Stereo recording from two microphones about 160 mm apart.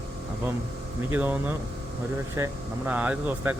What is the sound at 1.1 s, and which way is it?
Speech, 10° right (ahead or behind).